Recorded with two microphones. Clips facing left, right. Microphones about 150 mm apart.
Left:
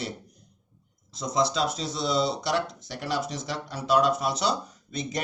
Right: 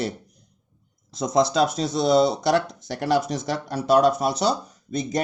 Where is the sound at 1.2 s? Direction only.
55° right (ahead or behind).